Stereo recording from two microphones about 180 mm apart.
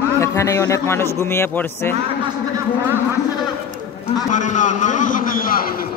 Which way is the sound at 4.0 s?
45° left (ahead or behind).